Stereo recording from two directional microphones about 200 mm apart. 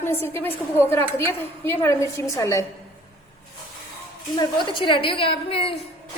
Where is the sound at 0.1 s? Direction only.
10° left (ahead or behind).